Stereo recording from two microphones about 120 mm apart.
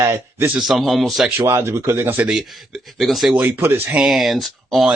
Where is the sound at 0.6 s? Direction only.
Centre (ahead or behind).